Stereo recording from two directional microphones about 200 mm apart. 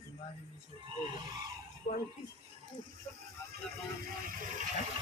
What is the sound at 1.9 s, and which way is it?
Speech, 40° left (ahead or behind).